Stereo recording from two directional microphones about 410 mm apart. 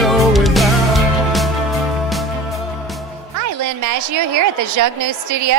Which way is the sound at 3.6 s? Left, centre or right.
Right.